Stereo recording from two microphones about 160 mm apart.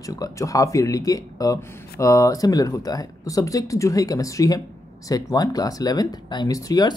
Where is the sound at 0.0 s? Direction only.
20° left (ahead or behind).